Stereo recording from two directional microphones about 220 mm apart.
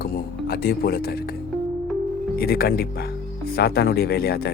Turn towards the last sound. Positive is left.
turn(degrees=45)  # may be behind; listen again after turning